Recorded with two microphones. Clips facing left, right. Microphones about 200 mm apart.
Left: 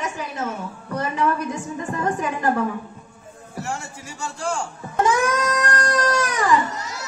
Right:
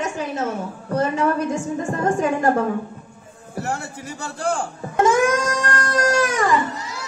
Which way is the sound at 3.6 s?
60° right (ahead or behind).